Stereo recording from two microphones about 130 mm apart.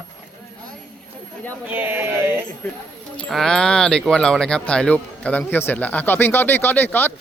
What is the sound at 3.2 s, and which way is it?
Speech, centre (ahead or behind).